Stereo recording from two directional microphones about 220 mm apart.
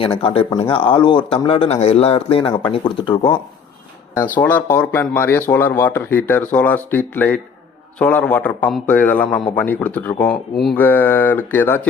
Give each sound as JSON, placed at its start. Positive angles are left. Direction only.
{"t": 0.0, "sound": "speech", "side_deg": 25}
{"t": 4.1, "sound": "speech", "side_deg": 10}